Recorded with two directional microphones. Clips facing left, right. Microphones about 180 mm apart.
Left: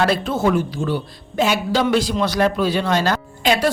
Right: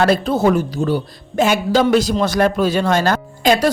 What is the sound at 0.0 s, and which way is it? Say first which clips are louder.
A woman's voice: right 4 dB; 40° right (ahead or behind).